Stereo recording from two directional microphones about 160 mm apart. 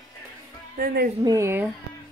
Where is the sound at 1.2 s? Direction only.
20° right (ahead or behind).